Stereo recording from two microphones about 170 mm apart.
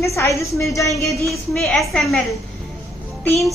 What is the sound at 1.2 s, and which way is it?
Speech, centre (ahead or behind).